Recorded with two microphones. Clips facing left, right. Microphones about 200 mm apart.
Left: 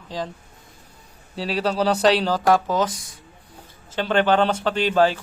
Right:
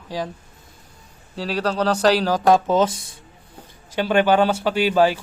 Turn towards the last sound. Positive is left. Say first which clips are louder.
# right 1 dB
turn(degrees=-10)  # may be behind; listen again after turning